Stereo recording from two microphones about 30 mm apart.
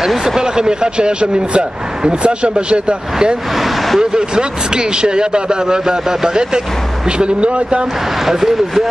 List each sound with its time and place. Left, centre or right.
0.4 s speech: right
3.5 s vehicle: centre
4.0 s a man's voice: right
7.1 s speech: right
8.3 s speech: centre